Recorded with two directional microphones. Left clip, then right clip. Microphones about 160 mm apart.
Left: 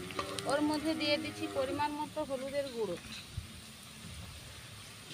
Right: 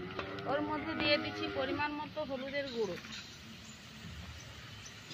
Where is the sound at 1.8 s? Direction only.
60° left (ahead or behind).